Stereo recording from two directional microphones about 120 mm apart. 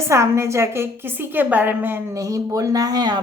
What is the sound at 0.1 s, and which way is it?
A woman's voice, 25° right (ahead or behind).